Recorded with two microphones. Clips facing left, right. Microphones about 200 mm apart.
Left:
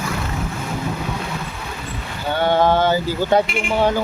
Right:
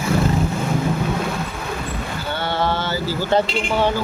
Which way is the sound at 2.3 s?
15° left (ahead or behind).